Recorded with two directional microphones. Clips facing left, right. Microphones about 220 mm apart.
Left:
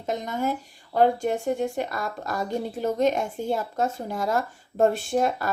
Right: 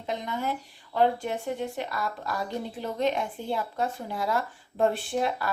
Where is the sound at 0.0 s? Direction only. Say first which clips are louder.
Left 4 dB; 45° left (ahead or behind).